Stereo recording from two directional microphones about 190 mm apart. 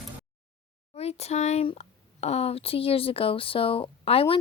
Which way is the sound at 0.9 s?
35° left (ahead or behind).